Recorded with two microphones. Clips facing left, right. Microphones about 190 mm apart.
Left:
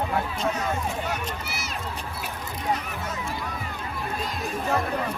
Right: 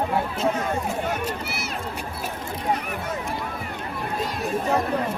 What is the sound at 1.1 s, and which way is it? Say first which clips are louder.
Speech: right 4 dB; 60° right (ahead or behind).